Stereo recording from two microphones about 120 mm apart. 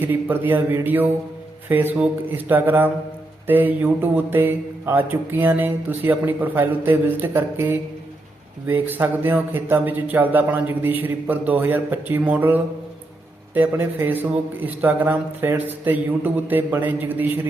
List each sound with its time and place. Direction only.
0.0 s mantra: 15° right (ahead or behind)